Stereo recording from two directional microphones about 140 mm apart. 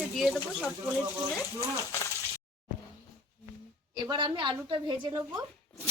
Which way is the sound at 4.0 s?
35° right (ahead or behind).